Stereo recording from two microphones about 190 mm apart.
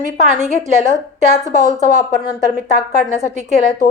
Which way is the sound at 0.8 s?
40° right (ahead or behind).